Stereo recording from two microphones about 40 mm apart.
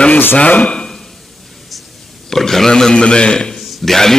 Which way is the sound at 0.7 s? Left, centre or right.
Centre.